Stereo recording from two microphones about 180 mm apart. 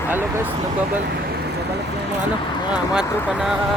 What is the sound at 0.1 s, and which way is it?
Speech, 10° right (ahead or behind).